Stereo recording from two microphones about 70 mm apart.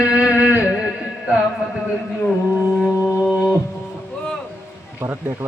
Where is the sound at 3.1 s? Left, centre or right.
Centre.